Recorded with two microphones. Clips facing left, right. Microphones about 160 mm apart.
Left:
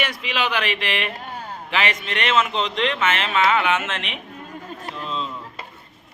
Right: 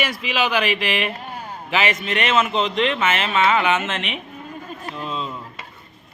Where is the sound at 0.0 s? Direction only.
5° right (ahead or behind).